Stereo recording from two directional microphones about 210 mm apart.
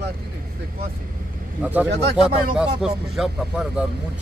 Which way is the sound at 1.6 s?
5° right (ahead or behind).